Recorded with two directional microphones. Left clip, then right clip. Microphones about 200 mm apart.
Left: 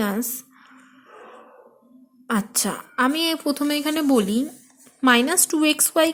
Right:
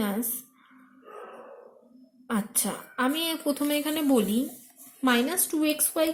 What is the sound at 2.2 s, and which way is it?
A woman's voice, 40° left (ahead or behind).